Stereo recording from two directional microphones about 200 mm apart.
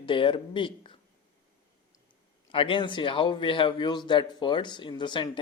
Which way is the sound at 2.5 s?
25° left (ahead or behind).